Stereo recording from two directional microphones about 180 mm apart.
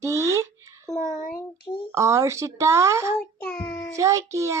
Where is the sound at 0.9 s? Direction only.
40° left (ahead or behind).